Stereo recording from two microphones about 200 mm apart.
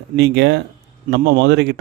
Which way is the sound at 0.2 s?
55° right (ahead or behind).